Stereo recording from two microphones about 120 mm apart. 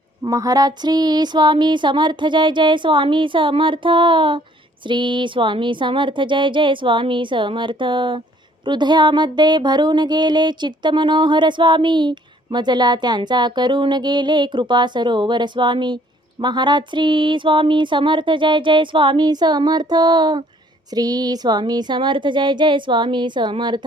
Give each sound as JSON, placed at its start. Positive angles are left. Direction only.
{"t": 0.2, "sound": "music", "side_deg": -30}
{"t": 4.9, "sound": "speech", "side_deg": -40}
{"t": 8.6, "sound": "music", "side_deg": -40}